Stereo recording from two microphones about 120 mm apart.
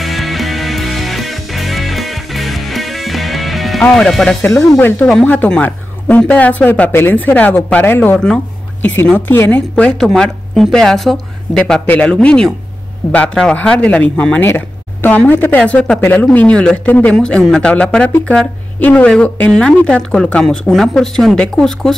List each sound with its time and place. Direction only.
0.0 s music: centre (ahead or behind)
3.8 s speech: 5° left (ahead or behind)
4.5 s speech: 25° left (ahead or behind); by 21.9 s 5° left (ahead or behind)